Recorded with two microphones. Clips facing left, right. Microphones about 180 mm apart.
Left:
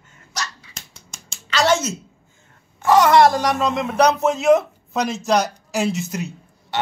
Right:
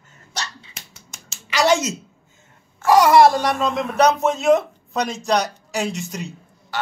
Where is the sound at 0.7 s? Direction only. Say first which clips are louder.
Left 1 dB; 5° right (ahead or behind).